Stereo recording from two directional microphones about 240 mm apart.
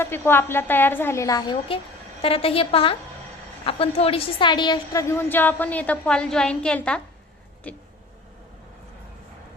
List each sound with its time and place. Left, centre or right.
0.0 s a woman's voice: centre